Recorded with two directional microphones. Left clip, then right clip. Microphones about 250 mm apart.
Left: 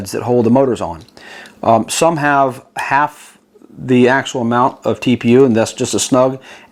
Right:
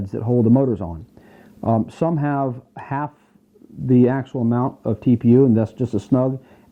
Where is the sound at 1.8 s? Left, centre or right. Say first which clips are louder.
Left 9 dB; centre.